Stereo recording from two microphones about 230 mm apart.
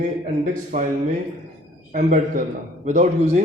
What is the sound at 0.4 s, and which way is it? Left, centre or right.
Speech, right.